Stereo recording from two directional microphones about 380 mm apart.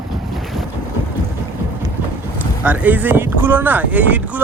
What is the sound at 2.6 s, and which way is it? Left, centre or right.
Speech, centre.